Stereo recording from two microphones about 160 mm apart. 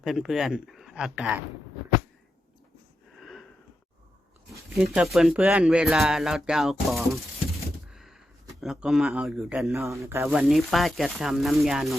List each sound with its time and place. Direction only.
0.0 s speech: centre (ahead or behind)
3.2 s sniff: centre (ahead or behind)
4.9 s speech: 5° right (ahead or behind)
7.9 s a sound: centre (ahead or behind)
8.6 s speech: centre (ahead or behind)
10.0 s speech: 15° right (ahead or behind)
10.3 s speech: centre (ahead or behind)